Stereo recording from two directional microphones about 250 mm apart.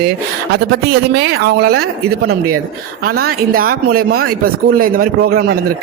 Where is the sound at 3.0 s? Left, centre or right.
Right.